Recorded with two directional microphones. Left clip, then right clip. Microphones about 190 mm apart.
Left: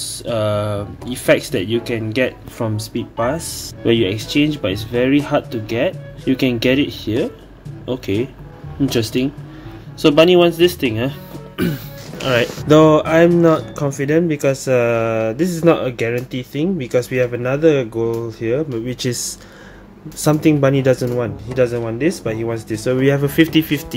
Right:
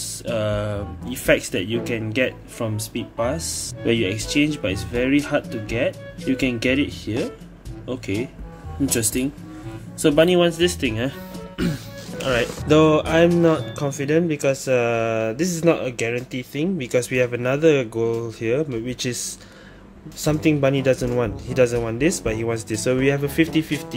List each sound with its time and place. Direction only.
0.0 s speech: centre (ahead or behind)
2.6 s speech: 15° left (ahead or behind); by 18.8 s 10° right (ahead or behind)
18.9 s speech: 5° left (ahead or behind)
21.1 s speech: 15° right (ahead or behind)
22.9 s speech: 5° left (ahead or behind)